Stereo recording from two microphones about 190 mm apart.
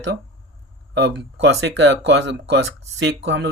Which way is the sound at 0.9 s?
65° right (ahead or behind).